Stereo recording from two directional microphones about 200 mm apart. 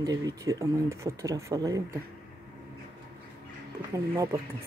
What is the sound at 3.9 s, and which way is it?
Speech, 15° right (ahead or behind).